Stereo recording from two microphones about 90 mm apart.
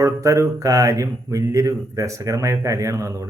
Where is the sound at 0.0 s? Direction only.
35° right (ahead or behind).